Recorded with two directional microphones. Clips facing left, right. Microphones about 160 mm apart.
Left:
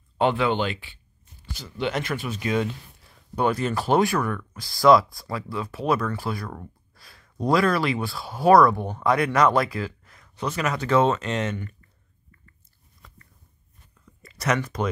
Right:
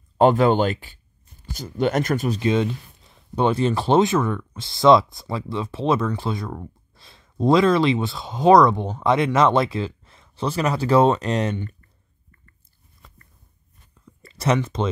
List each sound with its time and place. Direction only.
0.2 s speech: 40° right (ahead or behind)
2.4 s speech: 20° right (ahead or behind)
6.9 s a sound: 25° right (ahead or behind)
7.3 s speech: 25° right (ahead or behind)
14.2 s speech: 30° right (ahead or behind)